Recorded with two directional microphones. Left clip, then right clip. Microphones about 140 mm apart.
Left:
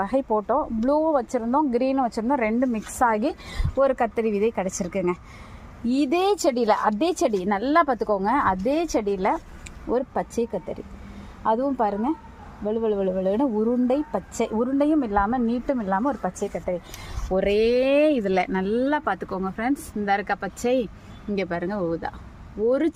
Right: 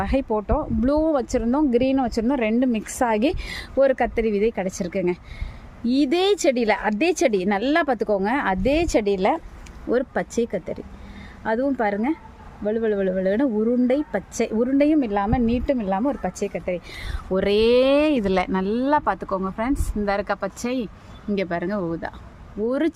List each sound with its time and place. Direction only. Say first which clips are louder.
0.0 s speech: even; 25° right (ahead or behind)
0.9 s a woman's voice: right 1 dB; 40° right (ahead or behind)
3.1 s a woman's voice: right 2 dB; 65° right (ahead or behind); by 10.6 s 35° right (ahead or behind)
11.4 s speech: even; 25° right (ahead or behind)
15.8 s speech: right 1 dB; 25° left (ahead or behind)
17.3 s speech: right 2 dB; 35° right (ahead or behind); by 22.1 s 20° right (ahead or behind)